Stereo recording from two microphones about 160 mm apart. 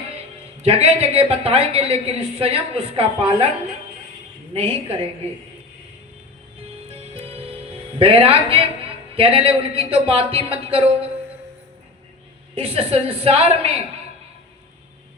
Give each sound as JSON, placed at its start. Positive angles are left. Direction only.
{"t": 0.5, "sound": "a man's voice", "side_deg": -40}
{"t": 4.5, "sound": "a man's voice", "side_deg": -35}
{"t": 6.9, "sound": "music", "side_deg": -40}
{"t": 7.9, "sound": "a man's voice", "side_deg": -35}
{"t": 12.5, "sound": "a man's voice", "side_deg": -35}